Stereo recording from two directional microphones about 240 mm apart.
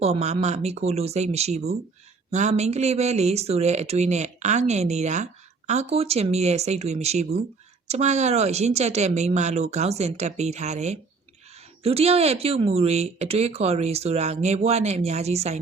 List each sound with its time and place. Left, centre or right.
0.0 s speech: right